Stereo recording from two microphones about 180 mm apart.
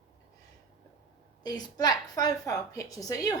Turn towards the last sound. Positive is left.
turn(degrees=20)  # may be behind; listen again after turning